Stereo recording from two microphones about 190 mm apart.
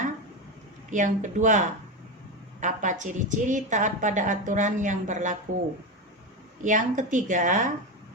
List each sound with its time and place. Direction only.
0.9 s a woman's voice: 40° right (ahead or behind)
6.6 s a woman's voice: 40° right (ahead or behind)